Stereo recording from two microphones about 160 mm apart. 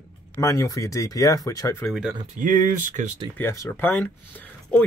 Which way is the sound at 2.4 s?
55° right (ahead or behind).